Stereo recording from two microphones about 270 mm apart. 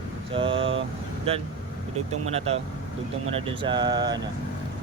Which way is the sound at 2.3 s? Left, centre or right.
Right.